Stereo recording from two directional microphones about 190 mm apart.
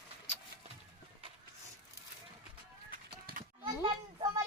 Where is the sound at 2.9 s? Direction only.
45° right (ahead or behind).